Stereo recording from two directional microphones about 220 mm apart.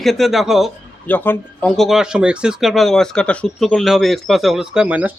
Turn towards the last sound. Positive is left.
turn(degrees=-5)  # may be behind; listen again after turning